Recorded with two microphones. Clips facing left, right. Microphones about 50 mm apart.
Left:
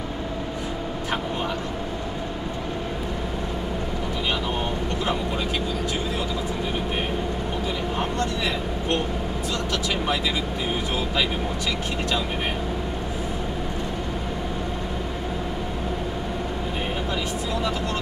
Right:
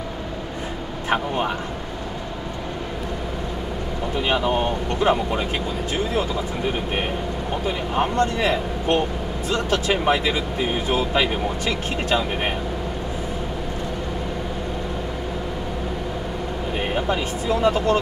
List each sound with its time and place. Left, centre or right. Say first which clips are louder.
5.0 s speech: right 9 dB; right
7.6 s speech: right 6 dB; right
17.1 s speech: right 4 dB; right